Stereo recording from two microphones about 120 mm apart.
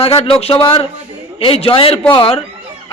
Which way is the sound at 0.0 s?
50° left (ahead or behind).